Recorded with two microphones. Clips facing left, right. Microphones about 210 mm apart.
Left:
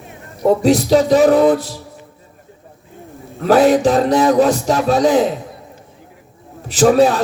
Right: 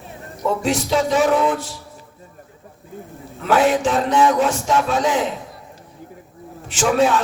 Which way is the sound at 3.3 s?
35° left (ahead or behind).